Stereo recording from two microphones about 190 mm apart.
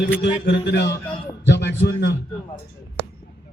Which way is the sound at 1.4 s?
65° left (ahead or behind).